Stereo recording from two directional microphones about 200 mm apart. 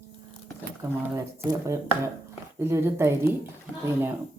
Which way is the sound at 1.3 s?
15° right (ahead or behind).